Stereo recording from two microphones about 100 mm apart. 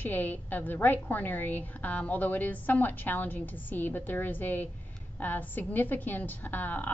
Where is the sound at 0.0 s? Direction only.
20° left (ahead or behind).